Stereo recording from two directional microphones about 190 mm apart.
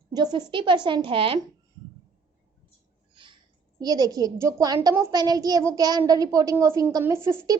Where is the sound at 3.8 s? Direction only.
20° right (ahead or behind).